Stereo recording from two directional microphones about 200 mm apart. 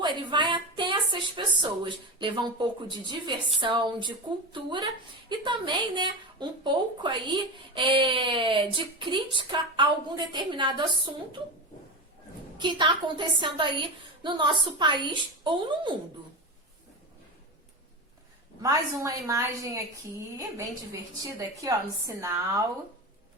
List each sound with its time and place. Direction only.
0.0 s a sound: 25° right (ahead or behind)
3.1 s speech: 25° right (ahead or behind)
12.5 s speech: 25° right (ahead or behind)
18.6 s a woman's voice: 15° right (ahead or behind)
21.2 s a woman's voice: 15° right (ahead or behind)